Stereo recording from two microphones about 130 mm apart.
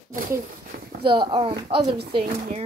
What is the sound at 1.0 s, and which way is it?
Speech, 40° right (ahead or behind).